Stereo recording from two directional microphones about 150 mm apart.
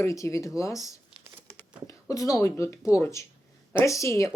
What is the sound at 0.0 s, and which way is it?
Speech, 20° left (ahead or behind).